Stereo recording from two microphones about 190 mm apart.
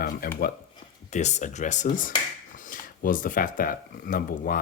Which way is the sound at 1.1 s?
40° left (ahead or behind).